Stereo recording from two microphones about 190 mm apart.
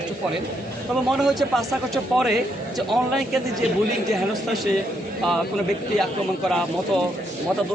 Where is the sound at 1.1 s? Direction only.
Centre (ahead or behind).